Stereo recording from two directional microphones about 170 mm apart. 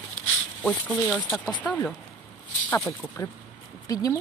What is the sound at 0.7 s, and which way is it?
Speech, 10° left (ahead or behind).